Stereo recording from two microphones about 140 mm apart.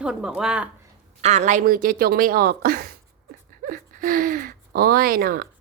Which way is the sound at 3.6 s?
80° right.